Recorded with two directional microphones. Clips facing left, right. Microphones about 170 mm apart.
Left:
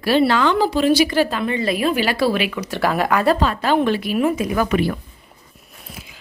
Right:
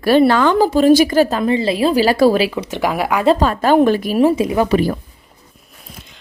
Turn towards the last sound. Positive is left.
turn(degrees=-25)  # may be behind; listen again after turning